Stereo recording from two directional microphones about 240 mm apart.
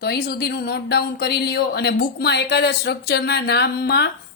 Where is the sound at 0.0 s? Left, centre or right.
Left.